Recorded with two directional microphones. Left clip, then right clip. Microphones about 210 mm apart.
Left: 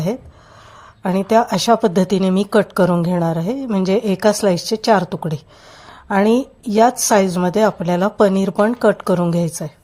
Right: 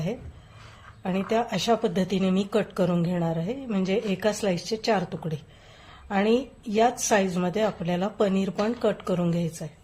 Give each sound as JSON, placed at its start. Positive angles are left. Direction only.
{"t": 1.0, "sound": "speech", "side_deg": 40}